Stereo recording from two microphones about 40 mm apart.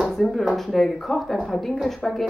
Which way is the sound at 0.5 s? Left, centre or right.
Centre.